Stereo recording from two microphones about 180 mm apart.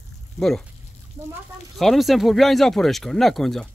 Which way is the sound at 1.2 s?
15° right (ahead or behind).